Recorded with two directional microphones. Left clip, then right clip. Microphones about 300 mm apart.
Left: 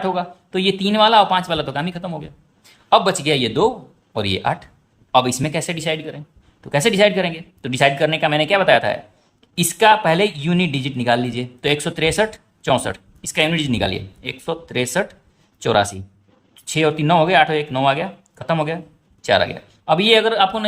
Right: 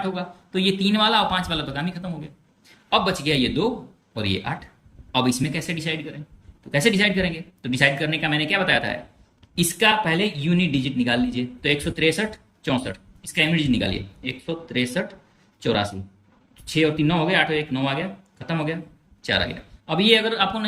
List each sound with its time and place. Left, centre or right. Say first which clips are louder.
0.0 s speech: left 7 dB; centre